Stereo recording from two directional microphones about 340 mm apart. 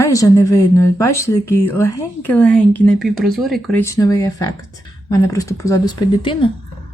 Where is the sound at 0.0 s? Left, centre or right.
Centre.